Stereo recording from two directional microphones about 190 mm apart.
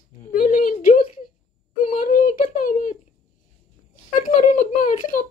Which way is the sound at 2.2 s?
40° left (ahead or behind).